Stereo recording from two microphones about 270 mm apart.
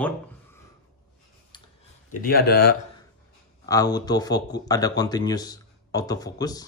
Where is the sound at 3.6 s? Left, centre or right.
Centre.